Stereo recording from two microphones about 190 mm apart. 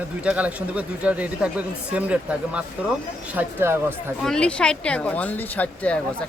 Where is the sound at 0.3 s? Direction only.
5° right (ahead or behind).